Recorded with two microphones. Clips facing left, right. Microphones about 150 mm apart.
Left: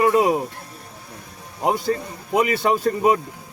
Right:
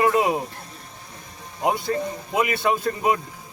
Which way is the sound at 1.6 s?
40° left (ahead or behind).